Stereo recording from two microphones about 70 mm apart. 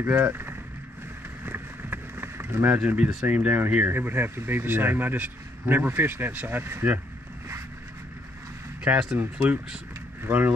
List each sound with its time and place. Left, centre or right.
0.0 s speech: right
1.4 s a sound: right
3.3 s speech: right
8.8 s speech: centre